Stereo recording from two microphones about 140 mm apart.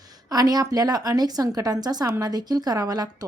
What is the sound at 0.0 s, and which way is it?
Speech, 25° right (ahead or behind).